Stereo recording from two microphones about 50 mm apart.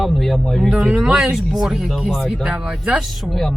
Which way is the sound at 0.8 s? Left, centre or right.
Centre.